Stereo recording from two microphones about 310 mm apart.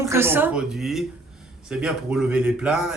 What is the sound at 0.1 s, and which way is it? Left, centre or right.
Speech, centre.